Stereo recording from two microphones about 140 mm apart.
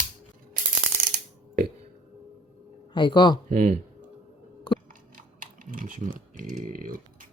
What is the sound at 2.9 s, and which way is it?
Speech, 35° left (ahead or behind).